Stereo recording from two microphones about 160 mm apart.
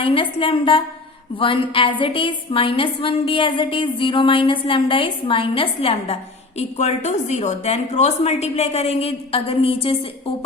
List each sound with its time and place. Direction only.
0.0 s a woman's voice: 35° left (ahead or behind)